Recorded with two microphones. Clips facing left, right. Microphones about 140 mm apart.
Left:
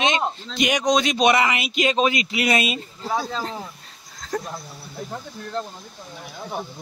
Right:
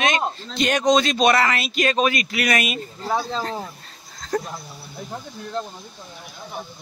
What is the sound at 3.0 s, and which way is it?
Speech, 30° right (ahead or behind).